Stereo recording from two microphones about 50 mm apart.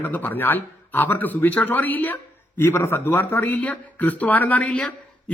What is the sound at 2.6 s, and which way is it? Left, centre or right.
Speech, left.